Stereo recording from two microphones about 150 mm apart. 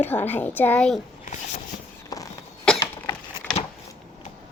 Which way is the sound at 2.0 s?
25° left (ahead or behind).